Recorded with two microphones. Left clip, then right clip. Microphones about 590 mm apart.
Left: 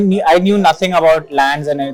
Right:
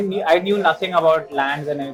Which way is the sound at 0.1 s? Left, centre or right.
Left.